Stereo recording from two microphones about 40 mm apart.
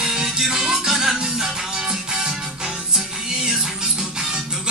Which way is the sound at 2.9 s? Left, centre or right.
Centre.